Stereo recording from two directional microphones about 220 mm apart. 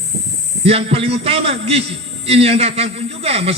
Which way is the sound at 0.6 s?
25° right (ahead or behind).